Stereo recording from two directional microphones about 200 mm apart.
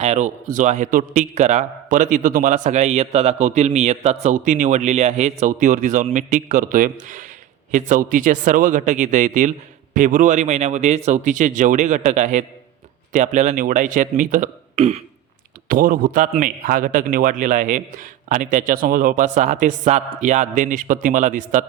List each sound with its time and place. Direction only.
0.0 s a man's voice: 35° right (ahead or behind)
15.7 s a man's voice: 45° right (ahead or behind)